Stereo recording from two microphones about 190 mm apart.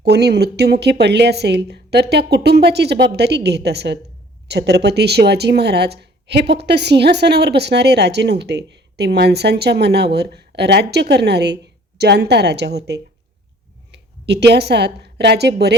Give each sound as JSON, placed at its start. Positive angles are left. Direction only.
{"t": 0.0, "sound": "a woman's voice", "side_deg": -60}